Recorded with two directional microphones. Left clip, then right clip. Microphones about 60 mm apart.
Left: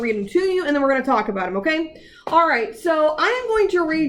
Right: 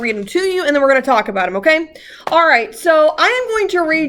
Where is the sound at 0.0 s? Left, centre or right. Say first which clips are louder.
Right 3 dB; right.